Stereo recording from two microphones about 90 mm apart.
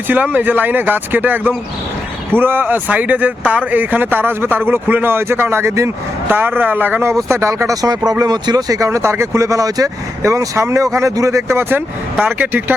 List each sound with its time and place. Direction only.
0.1 s speech: 20° right (ahead or behind)
12.1 s speech: 20° right (ahead or behind)